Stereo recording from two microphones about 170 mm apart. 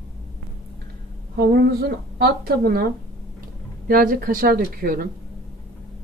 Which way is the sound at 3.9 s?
55° right (ahead or behind).